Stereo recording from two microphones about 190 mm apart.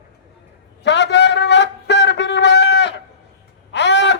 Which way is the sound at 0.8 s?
65° left (ahead or behind).